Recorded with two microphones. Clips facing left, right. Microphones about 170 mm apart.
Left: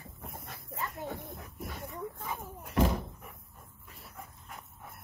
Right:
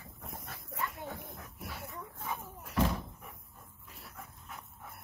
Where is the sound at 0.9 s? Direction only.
Centre (ahead or behind).